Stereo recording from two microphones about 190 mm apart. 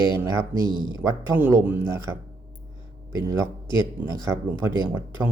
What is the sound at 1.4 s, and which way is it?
Speech, 10° right (ahead or behind).